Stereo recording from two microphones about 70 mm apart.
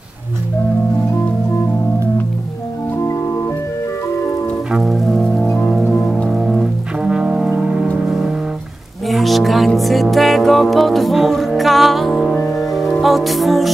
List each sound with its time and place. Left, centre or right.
3.0 s organ: left
4.6 s music: centre
5.9 s rain on surface: centre
6.2 s brass instrument: centre
8.0 s music: centre